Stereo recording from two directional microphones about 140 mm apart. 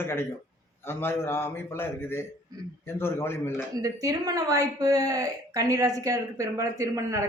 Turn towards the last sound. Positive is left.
turn(degrees=-20)  # may be behind; listen again after turning